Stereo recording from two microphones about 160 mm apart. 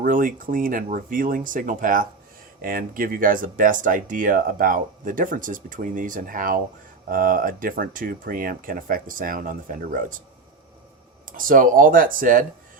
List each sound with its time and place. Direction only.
0.0 s speech: 60° right (ahead or behind)
11.3 s speech: 60° right (ahead or behind)